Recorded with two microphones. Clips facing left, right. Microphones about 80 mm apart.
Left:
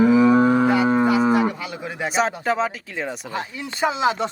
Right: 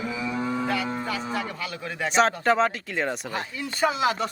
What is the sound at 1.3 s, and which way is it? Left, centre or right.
Speech, centre.